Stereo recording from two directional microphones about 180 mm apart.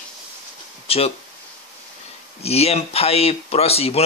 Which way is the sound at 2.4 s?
35° left (ahead or behind).